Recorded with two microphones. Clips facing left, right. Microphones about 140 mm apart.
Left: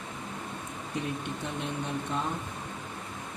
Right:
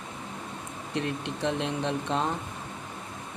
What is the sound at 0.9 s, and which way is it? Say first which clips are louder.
Speech: right 3 dB; 90° right.